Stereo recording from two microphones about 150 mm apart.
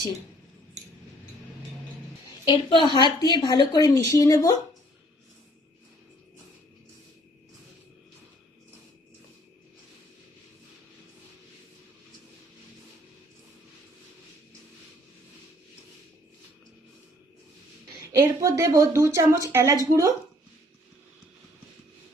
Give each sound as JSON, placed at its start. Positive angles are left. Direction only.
{"t": 2.4, "sound": "a woman's voice", "side_deg": 30}
{"t": 18.2, "sound": "speech", "side_deg": -20}